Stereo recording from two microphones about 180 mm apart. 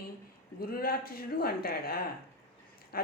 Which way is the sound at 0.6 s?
55° left (ahead or behind).